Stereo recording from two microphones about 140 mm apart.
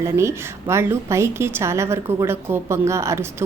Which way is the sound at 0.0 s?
20° right (ahead or behind).